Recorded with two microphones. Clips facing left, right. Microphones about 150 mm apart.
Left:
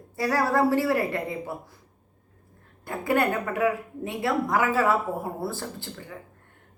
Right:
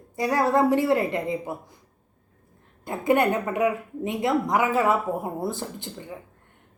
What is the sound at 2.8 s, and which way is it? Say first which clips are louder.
A woman's voice: right 3 dB; 20° right (ahead or behind).